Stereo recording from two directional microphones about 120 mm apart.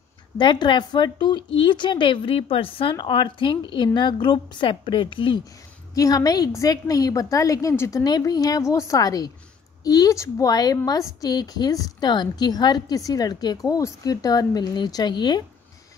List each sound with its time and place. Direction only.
0.4 s a woman's voice: 40° left (ahead or behind)
5.9 s a woman's voice: 30° left (ahead or behind)